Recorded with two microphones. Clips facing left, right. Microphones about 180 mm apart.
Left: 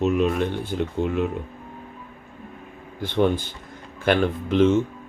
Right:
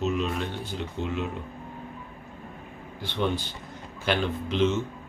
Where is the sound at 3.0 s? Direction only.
50° left (ahead or behind).